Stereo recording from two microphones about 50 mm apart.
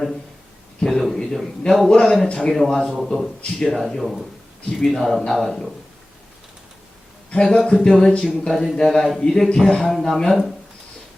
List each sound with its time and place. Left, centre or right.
0.8 s a man's voice: centre
2.9 s a man's voice: centre
7.3 s a man's voice: centre